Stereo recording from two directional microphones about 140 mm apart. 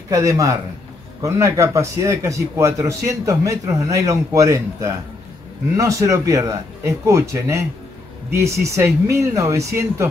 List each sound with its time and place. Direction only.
0.1 s speech: 20° right (ahead or behind)